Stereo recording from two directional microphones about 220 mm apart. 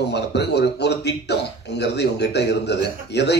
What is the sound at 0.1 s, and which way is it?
A man's voice, 50° left (ahead or behind).